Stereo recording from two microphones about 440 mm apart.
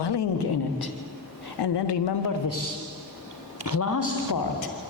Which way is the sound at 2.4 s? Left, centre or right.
Left.